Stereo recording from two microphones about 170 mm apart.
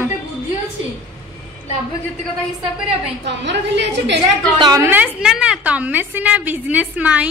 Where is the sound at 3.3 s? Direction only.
90° right.